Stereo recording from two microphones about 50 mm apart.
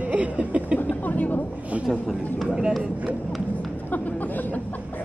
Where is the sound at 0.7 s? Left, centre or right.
Left.